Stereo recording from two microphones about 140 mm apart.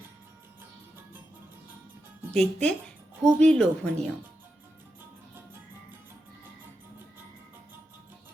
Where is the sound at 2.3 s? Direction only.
5° left (ahead or behind).